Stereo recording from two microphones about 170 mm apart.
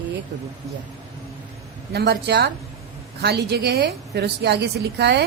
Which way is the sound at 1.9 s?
75° right (ahead or behind).